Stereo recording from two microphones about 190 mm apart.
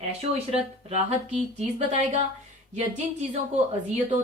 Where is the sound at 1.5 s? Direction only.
40° right (ahead or behind).